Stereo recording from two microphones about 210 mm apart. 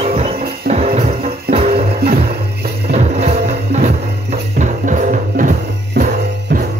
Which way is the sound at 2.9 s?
30° right (ahead or behind).